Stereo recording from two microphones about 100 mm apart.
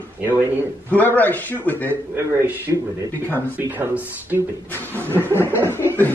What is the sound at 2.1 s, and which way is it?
A man's voice, 15° right (ahead or behind).